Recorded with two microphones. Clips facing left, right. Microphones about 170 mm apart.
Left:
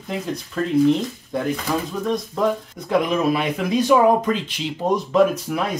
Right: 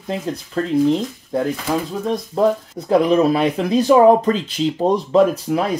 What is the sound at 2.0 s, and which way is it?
Speech, 35° right (ahead or behind).